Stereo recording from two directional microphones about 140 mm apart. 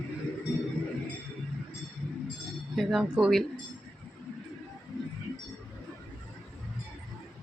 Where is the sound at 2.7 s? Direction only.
5° right (ahead or behind).